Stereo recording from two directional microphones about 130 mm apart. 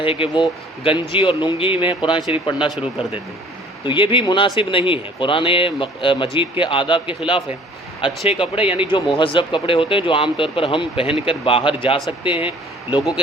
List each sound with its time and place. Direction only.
0.0 s speech: 45° left (ahead or behind)
2.6 s speech: 5° right (ahead or behind)
3.8 s speech: 40° left (ahead or behind)
8.3 s a man's voice: 45° left (ahead or behind)